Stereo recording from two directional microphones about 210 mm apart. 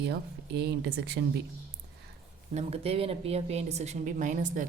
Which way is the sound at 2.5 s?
30° right (ahead or behind).